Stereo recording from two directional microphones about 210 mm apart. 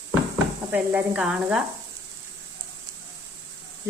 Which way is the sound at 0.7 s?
5° right (ahead or behind).